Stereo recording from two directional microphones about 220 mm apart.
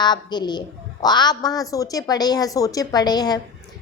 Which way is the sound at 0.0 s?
20° left (ahead or behind).